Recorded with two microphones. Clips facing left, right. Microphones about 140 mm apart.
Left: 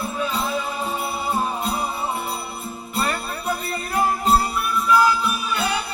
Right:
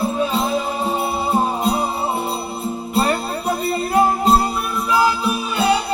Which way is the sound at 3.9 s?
25° right (ahead or behind).